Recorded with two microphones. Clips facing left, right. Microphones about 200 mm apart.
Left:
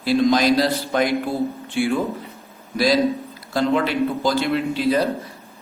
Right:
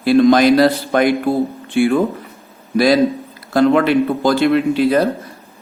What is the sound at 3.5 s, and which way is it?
A man's voice, 60° right (ahead or behind).